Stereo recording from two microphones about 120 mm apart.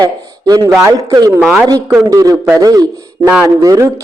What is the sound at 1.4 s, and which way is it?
Speech, 5° right (ahead or behind).